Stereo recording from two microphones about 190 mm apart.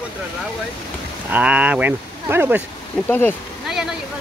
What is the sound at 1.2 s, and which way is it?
Speech, 5° right (ahead or behind).